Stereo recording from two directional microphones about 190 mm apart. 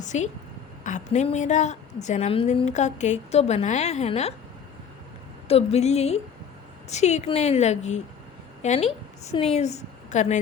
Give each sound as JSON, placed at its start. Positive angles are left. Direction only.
{"t": 0.0, "sound": "a woman's voice", "side_deg": 40}
{"t": 5.5, "sound": "a woman's voice", "side_deg": 35}